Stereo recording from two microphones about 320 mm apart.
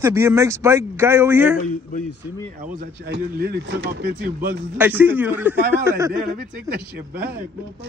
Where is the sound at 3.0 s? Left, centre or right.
Right.